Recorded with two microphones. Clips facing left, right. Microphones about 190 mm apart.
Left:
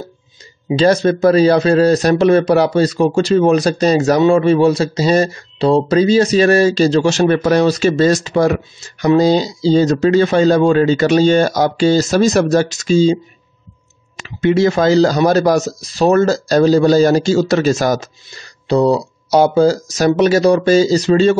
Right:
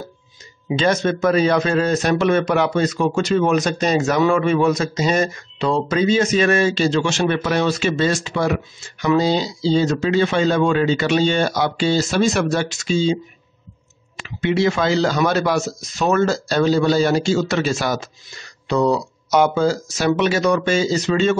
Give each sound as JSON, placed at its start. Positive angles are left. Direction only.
{"t": 0.7, "sound": "speech", "side_deg": 35}
{"t": 18.7, "sound": "speech", "side_deg": 35}